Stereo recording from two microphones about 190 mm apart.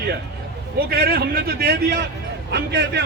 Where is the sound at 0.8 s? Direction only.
55° right (ahead or behind).